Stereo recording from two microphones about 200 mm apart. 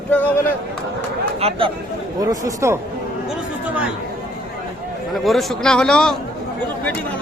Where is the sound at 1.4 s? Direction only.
30° right (ahead or behind).